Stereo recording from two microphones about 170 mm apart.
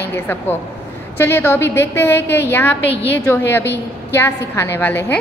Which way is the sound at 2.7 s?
90° left.